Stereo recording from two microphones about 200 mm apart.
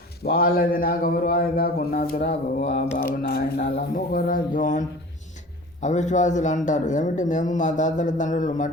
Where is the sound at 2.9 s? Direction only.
50° left (ahead or behind).